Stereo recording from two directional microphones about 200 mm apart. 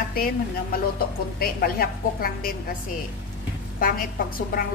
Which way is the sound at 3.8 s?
45° left (ahead or behind).